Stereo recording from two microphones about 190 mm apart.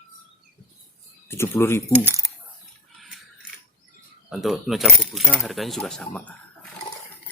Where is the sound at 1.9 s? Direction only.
15° right (ahead or behind).